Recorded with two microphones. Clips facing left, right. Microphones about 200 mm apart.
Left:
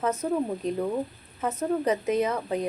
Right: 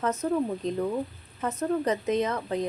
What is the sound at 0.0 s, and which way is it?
Speech, 10° left (ahead or behind).